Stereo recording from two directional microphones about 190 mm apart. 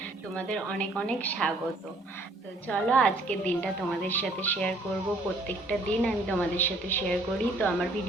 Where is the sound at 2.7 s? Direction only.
5° left (ahead or behind).